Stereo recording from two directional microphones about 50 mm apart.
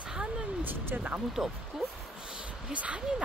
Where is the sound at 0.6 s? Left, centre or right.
Right.